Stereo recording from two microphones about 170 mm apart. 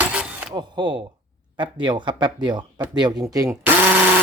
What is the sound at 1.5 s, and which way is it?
Speech, 25° right (ahead or behind).